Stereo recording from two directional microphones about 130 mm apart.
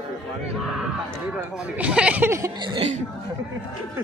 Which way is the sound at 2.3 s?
25° right (ahead or behind).